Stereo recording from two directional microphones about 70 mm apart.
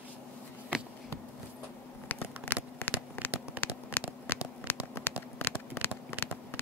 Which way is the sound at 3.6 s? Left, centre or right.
Left.